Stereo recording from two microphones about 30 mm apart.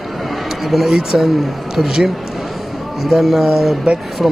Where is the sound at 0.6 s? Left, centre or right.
Centre.